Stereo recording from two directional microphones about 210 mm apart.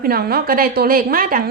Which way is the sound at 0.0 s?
45° right (ahead or behind).